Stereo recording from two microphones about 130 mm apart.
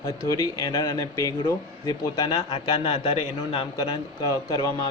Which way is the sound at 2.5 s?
45° left (ahead or behind).